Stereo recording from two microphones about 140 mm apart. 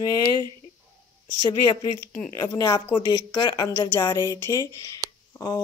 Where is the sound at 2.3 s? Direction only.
30° left (ahead or behind).